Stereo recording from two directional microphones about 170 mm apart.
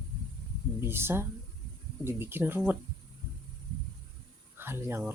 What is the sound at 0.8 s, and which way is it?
Speech, 15° right (ahead or behind).